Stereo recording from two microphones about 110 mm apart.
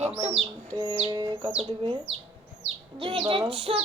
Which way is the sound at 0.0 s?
80° right.